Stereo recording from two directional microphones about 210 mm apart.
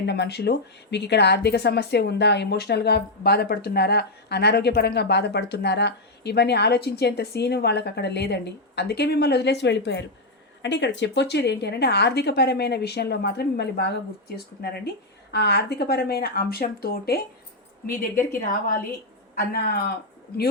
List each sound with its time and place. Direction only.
0.0 s speech: 55° left (ahead or behind)